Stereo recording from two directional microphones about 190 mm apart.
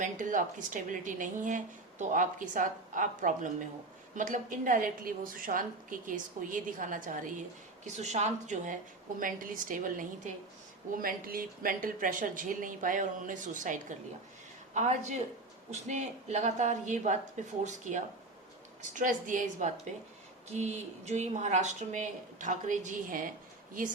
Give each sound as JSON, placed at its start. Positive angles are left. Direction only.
{"t": 0.0, "sound": "a woman's voice", "side_deg": -45}